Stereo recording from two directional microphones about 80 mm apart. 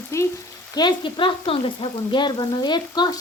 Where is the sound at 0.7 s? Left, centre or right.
Left.